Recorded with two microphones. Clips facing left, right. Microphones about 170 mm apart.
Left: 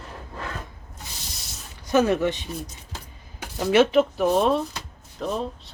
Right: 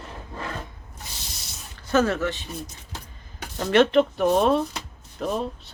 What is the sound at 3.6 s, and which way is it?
Speech, 5° left (ahead or behind).